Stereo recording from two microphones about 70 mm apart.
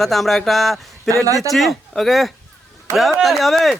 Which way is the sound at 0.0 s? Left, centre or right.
Centre.